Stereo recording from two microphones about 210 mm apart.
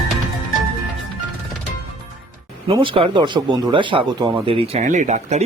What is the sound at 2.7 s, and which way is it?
Speech, 25° right (ahead or behind).